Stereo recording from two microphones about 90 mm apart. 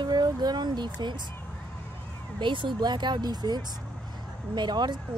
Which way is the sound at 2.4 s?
65° right (ahead or behind).